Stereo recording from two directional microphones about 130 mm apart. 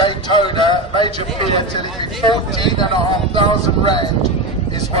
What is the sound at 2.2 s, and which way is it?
Speech, 35° left (ahead or behind).